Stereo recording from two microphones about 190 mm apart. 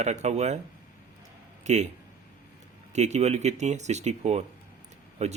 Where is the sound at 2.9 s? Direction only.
35° right (ahead or behind).